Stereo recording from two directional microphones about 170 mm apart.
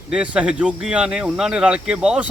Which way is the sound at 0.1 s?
5° right (ahead or behind).